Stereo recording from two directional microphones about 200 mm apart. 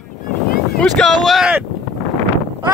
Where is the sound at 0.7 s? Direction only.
Centre (ahead or behind).